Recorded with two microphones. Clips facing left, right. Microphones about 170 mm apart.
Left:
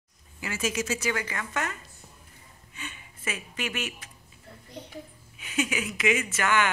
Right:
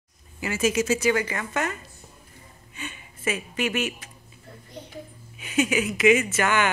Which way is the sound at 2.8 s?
10° right (ahead or behind).